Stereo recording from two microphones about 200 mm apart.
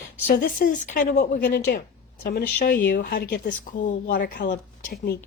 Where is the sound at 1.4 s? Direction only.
55° left (ahead or behind).